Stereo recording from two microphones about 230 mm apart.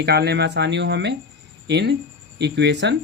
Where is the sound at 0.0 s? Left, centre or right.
Right.